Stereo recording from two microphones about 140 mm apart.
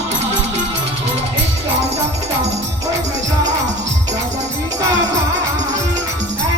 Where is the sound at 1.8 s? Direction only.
50° right (ahead or behind).